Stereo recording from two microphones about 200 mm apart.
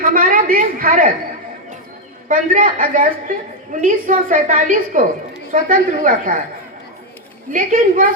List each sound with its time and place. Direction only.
0.1 s a woman's voice: 45° right (ahead or behind)
2.2 s a woman's voice: 40° right (ahead or behind)
7.5 s a woman's voice: 40° right (ahead or behind)